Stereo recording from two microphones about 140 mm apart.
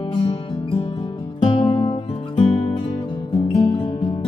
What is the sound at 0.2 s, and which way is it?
Music, 45° left (ahead or behind).